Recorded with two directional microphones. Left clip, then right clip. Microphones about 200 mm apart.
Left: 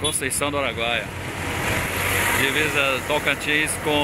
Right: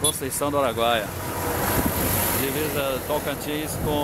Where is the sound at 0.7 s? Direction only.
30° right (ahead or behind).